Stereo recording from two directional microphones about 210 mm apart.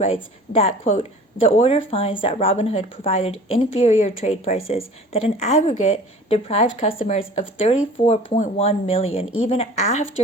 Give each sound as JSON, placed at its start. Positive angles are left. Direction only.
{"t": 0.0, "sound": "speech", "side_deg": 30}